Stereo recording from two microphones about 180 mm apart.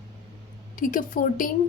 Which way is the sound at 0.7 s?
50° left (ahead or behind).